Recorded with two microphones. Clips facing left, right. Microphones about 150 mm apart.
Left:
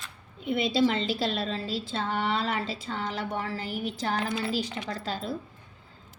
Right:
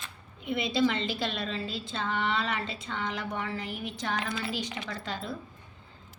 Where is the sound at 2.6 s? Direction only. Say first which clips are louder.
Left 2 dB; 35° left (ahead or behind).